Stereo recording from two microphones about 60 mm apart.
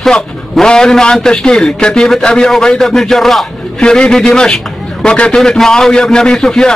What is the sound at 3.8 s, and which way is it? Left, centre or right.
A man's voice, centre.